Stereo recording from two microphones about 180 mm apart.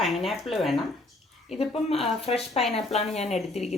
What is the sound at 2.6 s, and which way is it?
Speech, centre (ahead or behind).